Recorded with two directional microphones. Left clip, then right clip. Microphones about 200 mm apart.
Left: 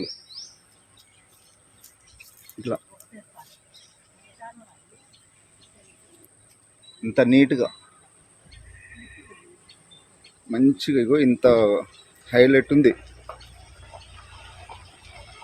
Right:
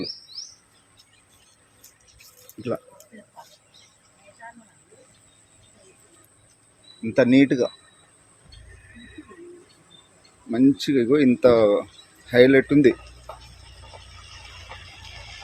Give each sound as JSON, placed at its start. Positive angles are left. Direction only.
{"t": 3.1, "sound": "speech", "side_deg": -45}
{"t": 4.4, "sound": "a sound", "side_deg": -45}
{"t": 7.0, "sound": "speech", "side_deg": 0}
{"t": 10.5, "sound": "speech", "side_deg": 0}